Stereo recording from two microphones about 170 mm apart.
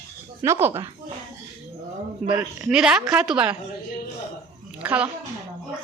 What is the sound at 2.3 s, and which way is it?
A man's voice, 5° right (ahead or behind).